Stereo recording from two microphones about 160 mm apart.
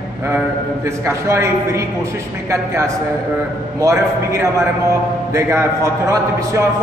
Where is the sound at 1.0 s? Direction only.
20° right (ahead or behind).